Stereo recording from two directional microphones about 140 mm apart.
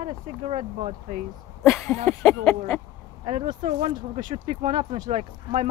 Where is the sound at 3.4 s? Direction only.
60° right (ahead or behind).